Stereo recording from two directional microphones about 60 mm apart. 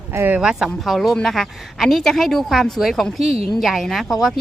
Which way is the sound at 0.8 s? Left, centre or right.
Centre.